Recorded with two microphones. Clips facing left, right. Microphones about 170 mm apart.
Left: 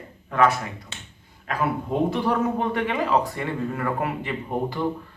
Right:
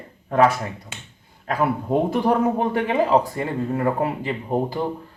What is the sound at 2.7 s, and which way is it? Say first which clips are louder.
Speech: right 4 dB; 35° right (ahead or behind).